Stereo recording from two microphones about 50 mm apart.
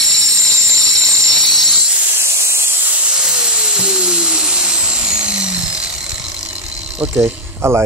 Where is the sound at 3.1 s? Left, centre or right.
Centre.